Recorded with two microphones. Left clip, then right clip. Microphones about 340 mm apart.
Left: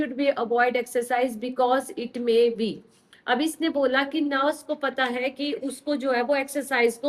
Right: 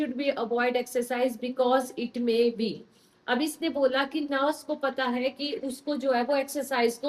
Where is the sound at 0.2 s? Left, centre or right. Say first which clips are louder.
Left 6 dB; left.